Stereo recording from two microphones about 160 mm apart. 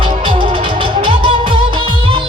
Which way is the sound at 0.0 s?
30° right (ahead or behind).